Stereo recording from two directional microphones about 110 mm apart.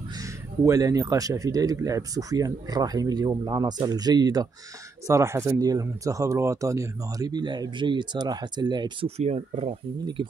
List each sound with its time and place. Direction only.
0.2 s speech: 30° right (ahead or behind)
5.0 s speech: 25° right (ahead or behind); by 8.9 s 40° right (ahead or behind)
9.0 s speech: 75° right (ahead or behind)